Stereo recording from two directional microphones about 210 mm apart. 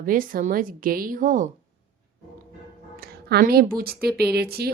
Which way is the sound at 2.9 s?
45° right (ahead or behind).